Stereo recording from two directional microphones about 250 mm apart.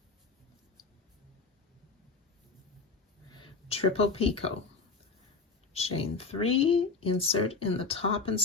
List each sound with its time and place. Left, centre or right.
3.3 s speech: left
5.7 s speech: left